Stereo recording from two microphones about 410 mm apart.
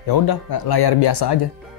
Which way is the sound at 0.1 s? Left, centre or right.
Left.